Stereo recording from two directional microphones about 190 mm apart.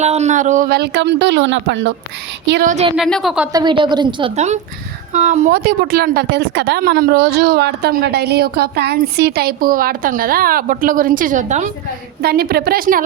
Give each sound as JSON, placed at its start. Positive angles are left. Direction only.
{"t": 0.0, "sound": "speech", "side_deg": -35}
{"t": 2.6, "sound": "a woman's voice", "side_deg": -35}
{"t": 2.9, "sound": "speech", "side_deg": 0}
{"t": 3.5, "sound": "a woman's voice", "side_deg": -25}
{"t": 4.4, "sound": "a woman's voice", "side_deg": -35}
{"t": 5.5, "sound": "a woman's voice", "side_deg": -55}
{"t": 12.2, "sound": "a woman's voice", "side_deg": -55}